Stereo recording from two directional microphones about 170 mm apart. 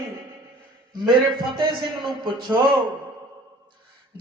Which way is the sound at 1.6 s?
25° right (ahead or behind).